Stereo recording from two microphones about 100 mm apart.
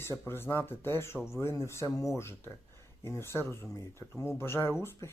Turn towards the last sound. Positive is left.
turn(degrees=25)  # may be behind; listen again after turning